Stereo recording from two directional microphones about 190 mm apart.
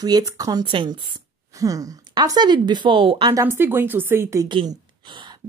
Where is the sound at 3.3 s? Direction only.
15° right (ahead or behind).